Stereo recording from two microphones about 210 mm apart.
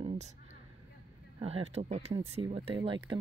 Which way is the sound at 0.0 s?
30° right (ahead or behind).